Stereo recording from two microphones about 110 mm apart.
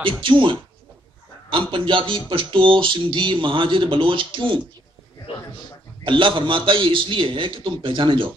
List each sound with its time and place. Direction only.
0.0 s speech: 50° right (ahead or behind)
5.3 s a man's voice: 60° left (ahead or behind)
6.0 s speech: 50° right (ahead or behind)